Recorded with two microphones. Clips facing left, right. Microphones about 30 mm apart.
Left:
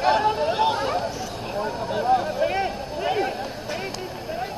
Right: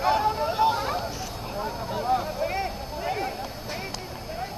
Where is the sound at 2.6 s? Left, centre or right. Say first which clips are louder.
Left 5 dB; left.